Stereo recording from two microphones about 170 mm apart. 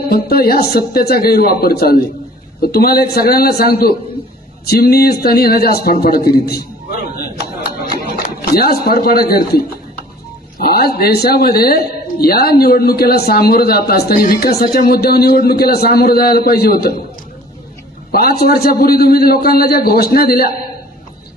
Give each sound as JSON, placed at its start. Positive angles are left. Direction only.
{"t": 0.1, "sound": "speech", "side_deg": 65}
{"t": 7.9, "sound": "speech", "side_deg": 65}
{"t": 10.6, "sound": "speech", "side_deg": 65}
{"t": 18.1, "sound": "a man's voice", "side_deg": 65}